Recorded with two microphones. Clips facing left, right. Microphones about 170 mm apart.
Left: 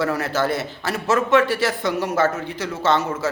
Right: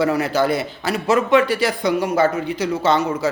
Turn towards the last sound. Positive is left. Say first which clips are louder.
# right 2 dB
turn(degrees=-15)  # may be behind; listen again after turning